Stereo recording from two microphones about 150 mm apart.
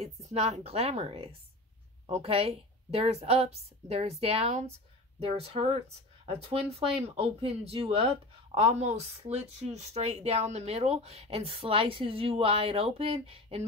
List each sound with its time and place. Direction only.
0.0 s a woman's voice: 45° right (ahead or behind)